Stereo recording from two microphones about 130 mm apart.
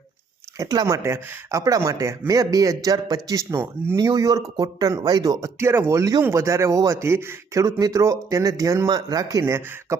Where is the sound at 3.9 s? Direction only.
30° right (ahead or behind).